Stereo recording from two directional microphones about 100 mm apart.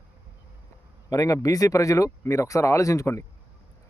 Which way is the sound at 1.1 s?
35° left (ahead or behind).